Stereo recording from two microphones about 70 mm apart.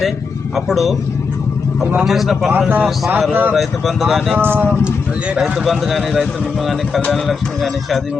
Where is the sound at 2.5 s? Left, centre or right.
Right.